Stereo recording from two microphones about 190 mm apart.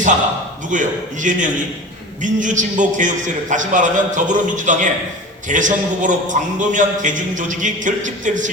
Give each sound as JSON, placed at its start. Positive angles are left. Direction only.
{"t": 0.7, "sound": "a man's voice", "side_deg": -40}